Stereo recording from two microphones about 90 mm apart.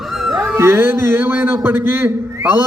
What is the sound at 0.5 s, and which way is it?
Speech, 30° right (ahead or behind).